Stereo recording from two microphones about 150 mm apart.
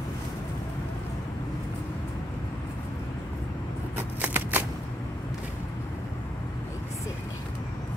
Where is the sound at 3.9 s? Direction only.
10° right (ahead or behind).